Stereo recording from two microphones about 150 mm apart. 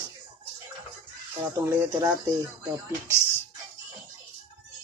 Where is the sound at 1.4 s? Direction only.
20° right (ahead or behind).